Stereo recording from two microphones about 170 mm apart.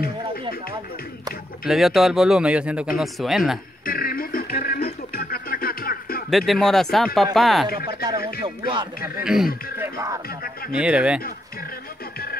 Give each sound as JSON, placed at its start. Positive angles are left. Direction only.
{"t": 1.7, "sound": "speech", "side_deg": 0}
{"t": 3.8, "sound": "music", "side_deg": 60}
{"t": 6.3, "sound": "speech", "side_deg": 0}
{"t": 8.4, "sound": "music", "side_deg": -30}
{"t": 9.0, "sound": "speech", "side_deg": -5}
{"t": 9.8, "sound": "music", "side_deg": -20}
{"t": 10.7, "sound": "speech", "side_deg": -5}